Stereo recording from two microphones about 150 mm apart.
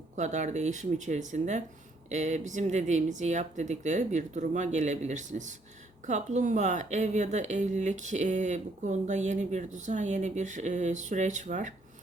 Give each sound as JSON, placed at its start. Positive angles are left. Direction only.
{"t": 0.2, "sound": "a woman's voice", "side_deg": -55}